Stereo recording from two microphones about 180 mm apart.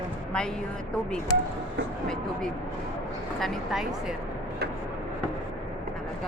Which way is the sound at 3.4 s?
Centre (ahead or behind).